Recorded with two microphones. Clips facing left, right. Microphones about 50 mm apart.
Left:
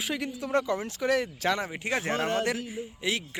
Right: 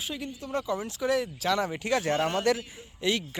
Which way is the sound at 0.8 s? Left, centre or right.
Left.